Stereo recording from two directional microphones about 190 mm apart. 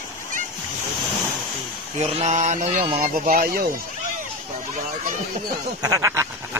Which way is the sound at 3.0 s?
50° right (ahead or behind).